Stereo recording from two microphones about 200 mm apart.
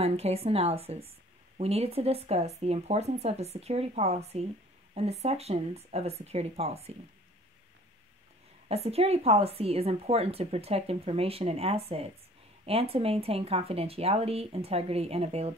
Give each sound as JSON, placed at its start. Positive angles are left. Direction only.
{"t": 0.0, "sound": "speech", "side_deg": -30}
{"t": 8.6, "sound": "speech", "side_deg": -30}